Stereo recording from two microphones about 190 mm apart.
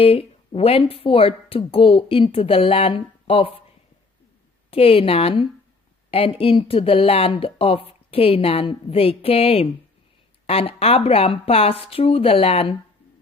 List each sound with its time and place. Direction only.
0.0 s speech: 30° left (ahead or behind)
4.7 s speech: 30° left (ahead or behind)